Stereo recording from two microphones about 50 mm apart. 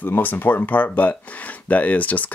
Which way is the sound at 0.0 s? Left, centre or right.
Left.